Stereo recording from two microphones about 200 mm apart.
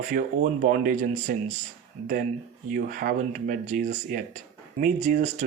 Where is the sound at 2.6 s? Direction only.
45° right (ahead or behind).